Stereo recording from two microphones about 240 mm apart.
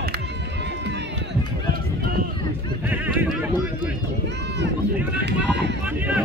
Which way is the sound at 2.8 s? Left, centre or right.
Centre.